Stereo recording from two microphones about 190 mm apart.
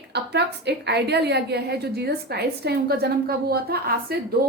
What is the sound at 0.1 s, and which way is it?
A woman's voice, 60° right (ahead or behind).